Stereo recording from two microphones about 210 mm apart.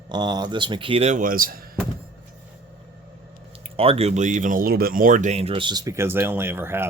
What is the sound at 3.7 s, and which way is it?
Speech, 25° right (ahead or behind).